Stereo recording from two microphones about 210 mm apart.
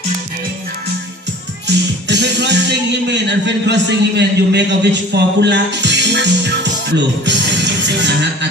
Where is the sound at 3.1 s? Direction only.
55° right (ahead or behind).